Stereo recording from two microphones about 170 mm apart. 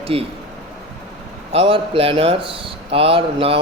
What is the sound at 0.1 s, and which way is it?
Speech, 35° right (ahead or behind).